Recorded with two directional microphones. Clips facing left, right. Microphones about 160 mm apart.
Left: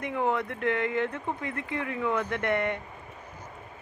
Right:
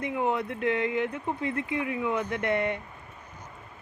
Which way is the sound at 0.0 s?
15° right (ahead or behind).